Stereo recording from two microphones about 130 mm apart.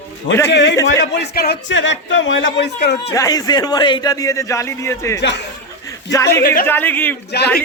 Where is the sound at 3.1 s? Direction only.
25° left (ahead or behind).